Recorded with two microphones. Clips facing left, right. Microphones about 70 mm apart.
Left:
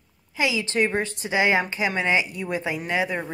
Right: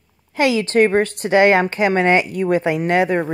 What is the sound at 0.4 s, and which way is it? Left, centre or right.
Speech, right.